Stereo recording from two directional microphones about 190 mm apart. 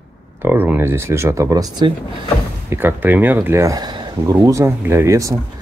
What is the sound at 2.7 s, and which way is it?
Speech, 10° right (ahead or behind).